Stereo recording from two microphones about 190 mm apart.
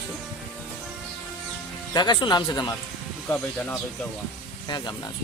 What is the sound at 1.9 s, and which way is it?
Speech, 25° left (ahead or behind).